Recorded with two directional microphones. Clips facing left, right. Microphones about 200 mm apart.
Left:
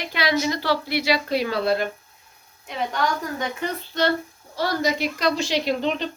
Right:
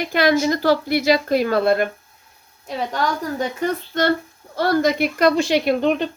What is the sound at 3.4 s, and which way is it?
A woman's voice, 50° right (ahead or behind).